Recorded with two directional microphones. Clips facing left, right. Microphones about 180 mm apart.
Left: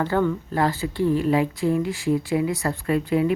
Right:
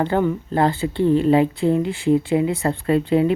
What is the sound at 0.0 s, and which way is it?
A woman's voice, 20° right (ahead or behind).